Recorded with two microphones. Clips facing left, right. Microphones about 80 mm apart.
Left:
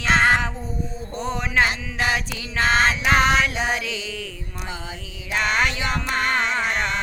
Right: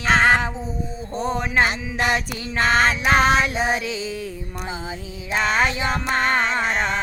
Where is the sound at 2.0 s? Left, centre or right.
Centre.